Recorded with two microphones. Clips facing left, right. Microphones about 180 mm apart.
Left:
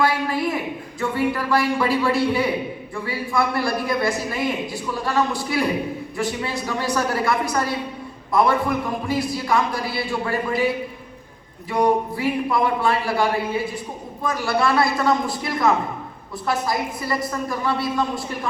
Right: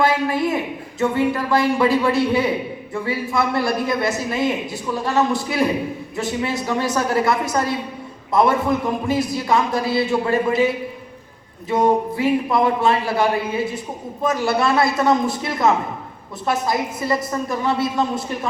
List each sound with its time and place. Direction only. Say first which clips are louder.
0.0 s a sound: right 3 dB; 20° right (ahead or behind)
0.9 s a man's voice: right 4 dB; 20° right (ahead or behind)
11.7 s a man's voice: right 2 dB; 20° right (ahead or behind)